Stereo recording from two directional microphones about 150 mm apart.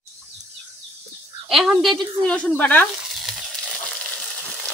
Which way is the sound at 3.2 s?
5° left (ahead or behind).